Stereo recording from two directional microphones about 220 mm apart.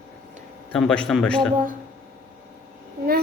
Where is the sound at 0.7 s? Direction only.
5° left (ahead or behind).